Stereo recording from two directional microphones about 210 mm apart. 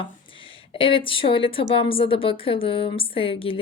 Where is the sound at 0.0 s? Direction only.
25° left (ahead or behind).